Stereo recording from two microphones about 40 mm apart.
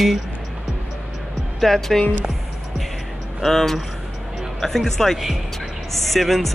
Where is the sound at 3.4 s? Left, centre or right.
Centre.